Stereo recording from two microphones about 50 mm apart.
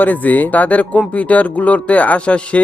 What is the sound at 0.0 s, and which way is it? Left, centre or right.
Speech, left.